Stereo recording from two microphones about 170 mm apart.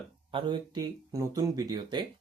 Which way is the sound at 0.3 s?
30° right (ahead or behind).